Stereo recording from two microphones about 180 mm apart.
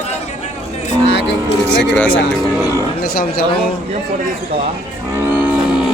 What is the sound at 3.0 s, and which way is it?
Speech, 55° left (ahead or behind).